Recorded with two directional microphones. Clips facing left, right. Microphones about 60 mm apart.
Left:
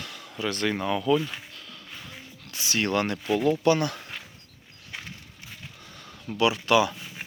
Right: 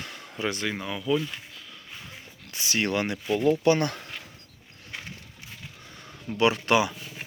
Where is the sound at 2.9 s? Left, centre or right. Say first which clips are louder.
Left 4 dB; centre.